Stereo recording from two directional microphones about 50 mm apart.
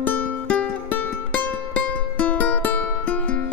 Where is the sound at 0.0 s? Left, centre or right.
Left.